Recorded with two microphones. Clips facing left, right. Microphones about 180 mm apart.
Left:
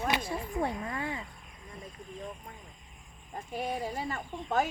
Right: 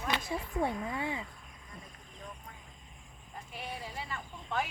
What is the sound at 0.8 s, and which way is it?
Speech, 10° right (ahead or behind).